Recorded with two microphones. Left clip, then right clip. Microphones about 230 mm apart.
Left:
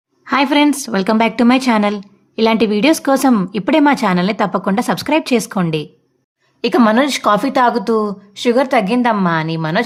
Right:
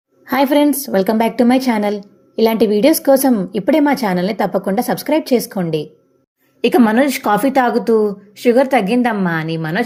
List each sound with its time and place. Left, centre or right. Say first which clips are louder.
0.3 s a woman's voice: even; centre
6.6 s a woman's voice: even; centre